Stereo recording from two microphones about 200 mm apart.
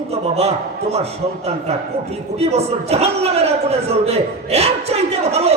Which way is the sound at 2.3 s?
30° right (ahead or behind).